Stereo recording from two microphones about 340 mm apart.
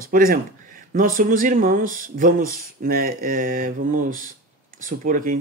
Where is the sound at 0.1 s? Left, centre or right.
Right.